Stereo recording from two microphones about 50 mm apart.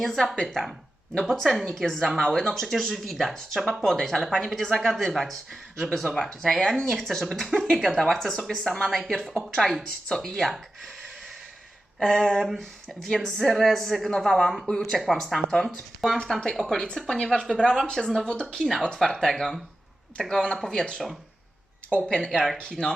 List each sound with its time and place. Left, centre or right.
0.0 s speech: centre
1.2 s speech: centre
11.9 s speech: centre
15.4 s speech: centre
19.4 s speech: centre
20.1 s speech: centre
22.3 s speech: centre